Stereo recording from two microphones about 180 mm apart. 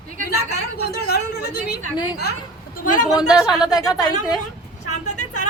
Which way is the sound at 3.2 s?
20° left (ahead or behind).